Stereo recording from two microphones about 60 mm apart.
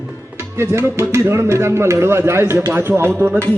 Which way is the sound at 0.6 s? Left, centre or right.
Right.